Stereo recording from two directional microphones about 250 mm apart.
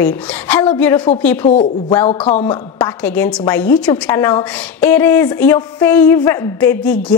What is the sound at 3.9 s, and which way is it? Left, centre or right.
Speech, centre.